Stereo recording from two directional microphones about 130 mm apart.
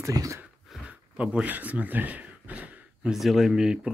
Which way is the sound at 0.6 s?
5° right (ahead or behind).